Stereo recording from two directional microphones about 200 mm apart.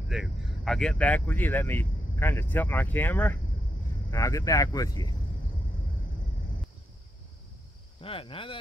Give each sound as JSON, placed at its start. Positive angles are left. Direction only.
{"t": 0.1, "sound": "speech", "side_deg": 0}
{"t": 8.0, "sound": "speech", "side_deg": 25}